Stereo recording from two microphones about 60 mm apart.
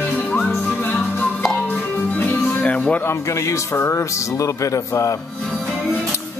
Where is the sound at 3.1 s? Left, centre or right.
Left.